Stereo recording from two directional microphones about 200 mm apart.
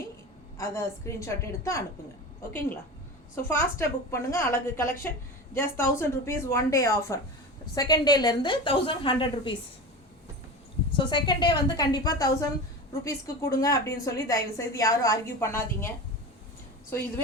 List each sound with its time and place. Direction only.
0.6 s a woman's voice: 15° left (ahead or behind)
3.5 s a woman's voice: 10° left (ahead or behind)
10.9 s a woman's voice: 20° left (ahead or behind)